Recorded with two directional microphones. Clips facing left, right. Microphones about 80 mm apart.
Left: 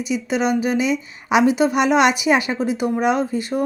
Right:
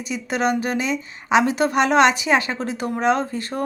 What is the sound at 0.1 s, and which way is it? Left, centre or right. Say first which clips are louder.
A woman's voice: left 1 dB; centre.